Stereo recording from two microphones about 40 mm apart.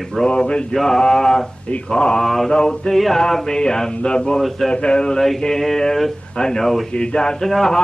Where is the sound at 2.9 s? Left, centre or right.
Centre.